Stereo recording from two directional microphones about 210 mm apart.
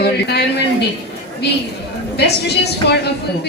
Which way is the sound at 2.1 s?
50° left (ahead or behind).